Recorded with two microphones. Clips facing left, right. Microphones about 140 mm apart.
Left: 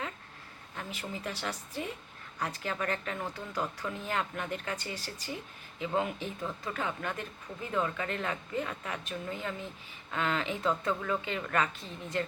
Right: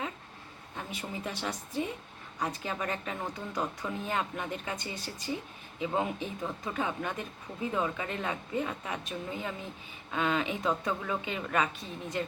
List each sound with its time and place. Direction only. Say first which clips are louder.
0.8 s speech: right 1 dB; 15° right (ahead or behind)